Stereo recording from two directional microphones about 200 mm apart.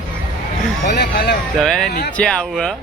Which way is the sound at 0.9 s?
55° left (ahead or behind).